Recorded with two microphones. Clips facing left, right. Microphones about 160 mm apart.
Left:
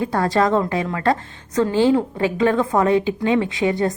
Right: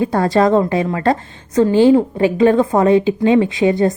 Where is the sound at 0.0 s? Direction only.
20° right (ahead or behind).